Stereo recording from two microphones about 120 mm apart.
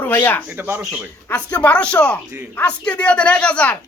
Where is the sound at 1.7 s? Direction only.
10° left (ahead or behind).